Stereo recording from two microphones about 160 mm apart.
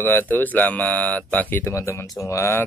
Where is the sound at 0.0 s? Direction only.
10° left (ahead or behind).